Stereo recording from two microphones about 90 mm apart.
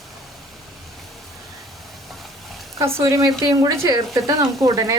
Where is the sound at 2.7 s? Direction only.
35° right (ahead or behind).